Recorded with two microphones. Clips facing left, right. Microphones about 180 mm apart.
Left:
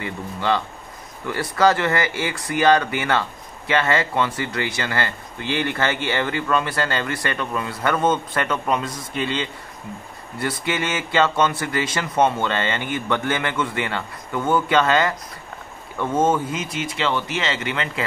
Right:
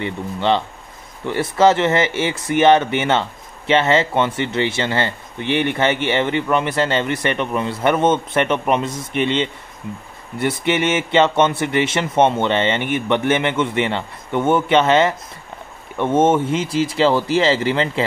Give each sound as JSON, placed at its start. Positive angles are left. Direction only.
{"t": 0.0, "sound": "speech", "side_deg": -25}